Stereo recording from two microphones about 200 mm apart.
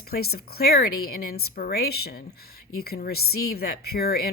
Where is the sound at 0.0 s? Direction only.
50° left (ahead or behind).